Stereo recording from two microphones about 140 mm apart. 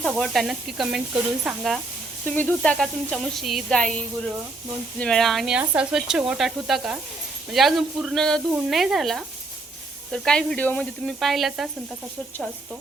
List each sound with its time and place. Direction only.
0.2 s speech: centre (ahead or behind)
2.2 s sizzle: 10° left (ahead or behind)
4.9 s speech: 5° left (ahead or behind)